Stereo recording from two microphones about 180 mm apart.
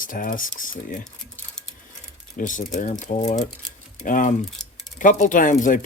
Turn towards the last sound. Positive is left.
turn(degrees=45)  # may be behind; listen again after turning